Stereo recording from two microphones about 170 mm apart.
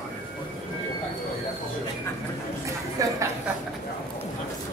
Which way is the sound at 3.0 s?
20° right (ahead or behind).